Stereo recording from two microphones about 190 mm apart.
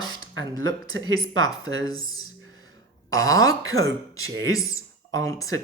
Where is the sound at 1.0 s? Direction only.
20° left (ahead or behind).